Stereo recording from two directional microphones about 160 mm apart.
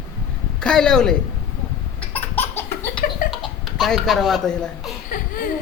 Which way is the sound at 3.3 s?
Centre (ahead or behind).